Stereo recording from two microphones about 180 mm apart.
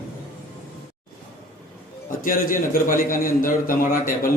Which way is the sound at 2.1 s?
50° left (ahead or behind).